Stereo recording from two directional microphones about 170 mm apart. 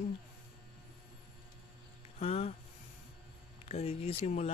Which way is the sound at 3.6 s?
40° left (ahead or behind).